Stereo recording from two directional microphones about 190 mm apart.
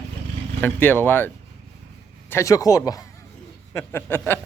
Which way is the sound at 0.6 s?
10° left (ahead or behind).